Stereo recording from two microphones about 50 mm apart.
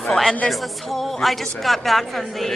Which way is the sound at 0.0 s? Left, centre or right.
Centre.